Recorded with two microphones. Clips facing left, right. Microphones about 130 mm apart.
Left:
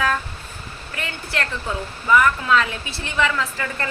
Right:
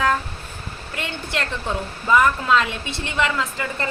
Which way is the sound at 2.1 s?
25° right (ahead or behind).